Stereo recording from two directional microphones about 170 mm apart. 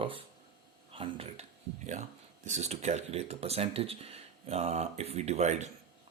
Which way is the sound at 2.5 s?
40° right (ahead or behind).